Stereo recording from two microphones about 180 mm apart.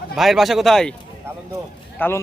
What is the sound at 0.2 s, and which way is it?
Speech, centre (ahead or behind).